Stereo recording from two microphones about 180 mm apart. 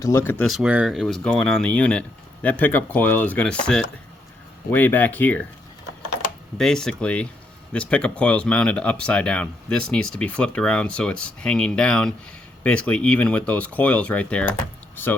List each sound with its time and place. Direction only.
0.0 s speech: 15° left (ahead or behind)
0.4 s speech: 5° right (ahead or behind)
6.6 s speech: 5° left (ahead or behind)